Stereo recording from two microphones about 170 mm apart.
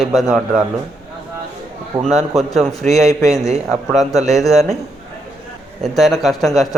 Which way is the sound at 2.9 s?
20° left (ahead or behind).